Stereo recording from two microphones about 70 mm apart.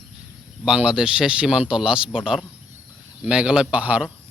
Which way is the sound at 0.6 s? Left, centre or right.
Centre.